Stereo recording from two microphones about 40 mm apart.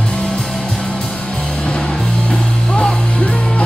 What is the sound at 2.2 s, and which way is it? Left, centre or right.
Music, left.